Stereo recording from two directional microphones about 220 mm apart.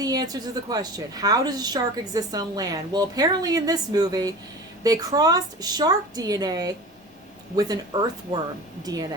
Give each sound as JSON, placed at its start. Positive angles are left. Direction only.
{"t": 0.0, "sound": "a woman's voice", "side_deg": -15}